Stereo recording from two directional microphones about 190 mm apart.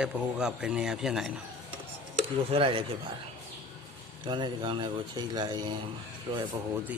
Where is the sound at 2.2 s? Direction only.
30° right (ahead or behind).